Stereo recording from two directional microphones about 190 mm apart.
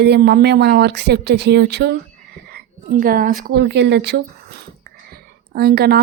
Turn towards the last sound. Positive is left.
turn(degrees=-55)  # may be behind; listen again after turning